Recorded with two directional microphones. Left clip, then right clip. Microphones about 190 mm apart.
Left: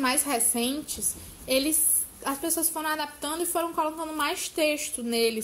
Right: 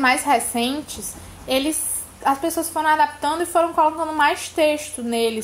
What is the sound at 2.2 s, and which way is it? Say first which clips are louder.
A woman's voice: right 10 dB; 40° left (ahead or behind).